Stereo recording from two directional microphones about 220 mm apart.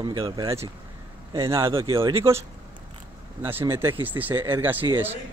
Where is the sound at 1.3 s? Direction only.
10° right (ahead or behind).